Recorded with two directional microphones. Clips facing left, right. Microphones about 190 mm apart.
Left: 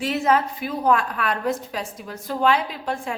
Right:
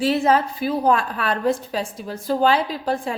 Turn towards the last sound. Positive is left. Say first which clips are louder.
# right 4 dB
turn(degrees=-35)  # may be behind; listen again after turning